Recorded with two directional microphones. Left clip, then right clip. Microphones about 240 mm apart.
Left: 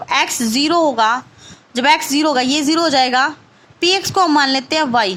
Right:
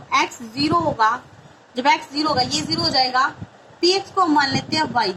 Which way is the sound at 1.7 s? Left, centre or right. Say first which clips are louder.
Left 5 dB; left.